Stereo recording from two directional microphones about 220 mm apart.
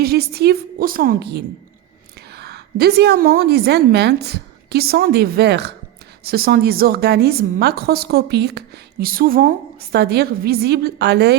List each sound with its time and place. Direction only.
0.0 s a woman's voice: 45° right (ahead or behind)